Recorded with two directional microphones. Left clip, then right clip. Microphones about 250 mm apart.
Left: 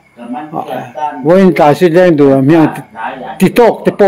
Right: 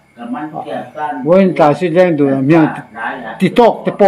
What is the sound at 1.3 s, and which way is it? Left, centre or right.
Speech, left.